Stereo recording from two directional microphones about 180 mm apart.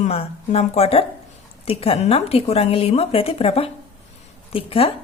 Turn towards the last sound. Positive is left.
turn(degrees=30)  # may be behind; listen again after turning